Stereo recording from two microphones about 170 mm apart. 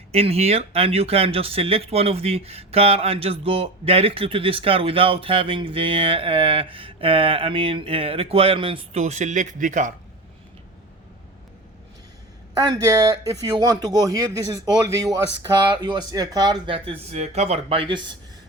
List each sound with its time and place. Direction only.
0.1 s speech: 35° right (ahead or behind)
12.5 s speech: 25° right (ahead or behind)